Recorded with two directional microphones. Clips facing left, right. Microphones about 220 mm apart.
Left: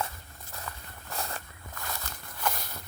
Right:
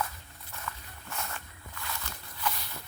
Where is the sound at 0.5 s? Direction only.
35° left (ahead or behind).